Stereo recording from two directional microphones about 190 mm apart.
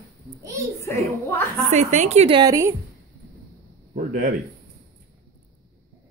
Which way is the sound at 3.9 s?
40° right (ahead or behind).